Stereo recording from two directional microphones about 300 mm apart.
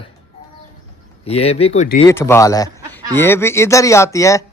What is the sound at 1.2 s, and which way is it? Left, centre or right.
Speech, centre.